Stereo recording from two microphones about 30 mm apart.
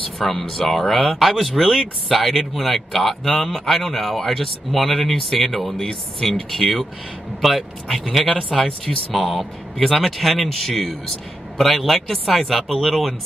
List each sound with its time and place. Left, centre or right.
0.3 s speech: centre
7.4 s speech: centre
9.8 s speech: centre